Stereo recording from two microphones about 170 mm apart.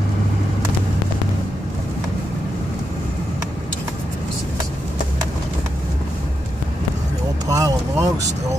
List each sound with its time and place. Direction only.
7.4 s vehicle: 20° right (ahead or behind)